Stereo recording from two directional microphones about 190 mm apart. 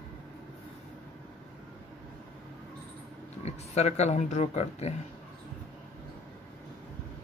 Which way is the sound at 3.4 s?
35° left (ahead or behind).